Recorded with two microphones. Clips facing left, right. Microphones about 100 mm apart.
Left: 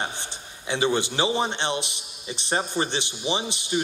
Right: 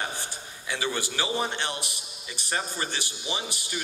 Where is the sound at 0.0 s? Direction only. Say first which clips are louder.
Left 2 dB; 20° left (ahead or behind).